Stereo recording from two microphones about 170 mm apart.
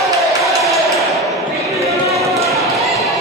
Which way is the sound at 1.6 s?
20° right (ahead or behind).